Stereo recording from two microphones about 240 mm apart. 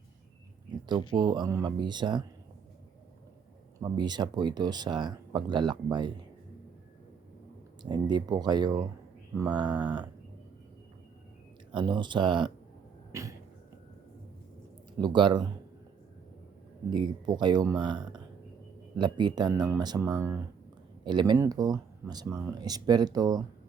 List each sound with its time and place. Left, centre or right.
1.1 s speech: centre
3.8 s speech: centre
7.8 s speech: centre
11.7 s speech: centre
13.1 s cough: centre
14.9 s speech: centre
16.9 s speech: centre